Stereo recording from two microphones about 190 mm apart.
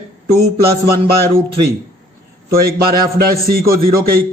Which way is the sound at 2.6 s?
50° right (ahead or behind).